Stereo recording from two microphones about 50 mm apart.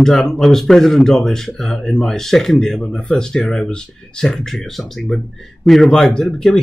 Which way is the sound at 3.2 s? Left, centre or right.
Centre.